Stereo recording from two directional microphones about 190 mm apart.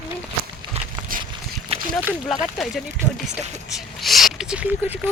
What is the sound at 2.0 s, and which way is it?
Speech, 5° right (ahead or behind).